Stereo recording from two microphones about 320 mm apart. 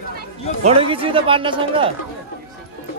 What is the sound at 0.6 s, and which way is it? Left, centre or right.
Speech, centre.